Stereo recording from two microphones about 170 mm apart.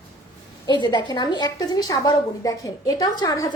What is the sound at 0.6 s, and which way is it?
A woman's voice, 25° left (ahead or behind).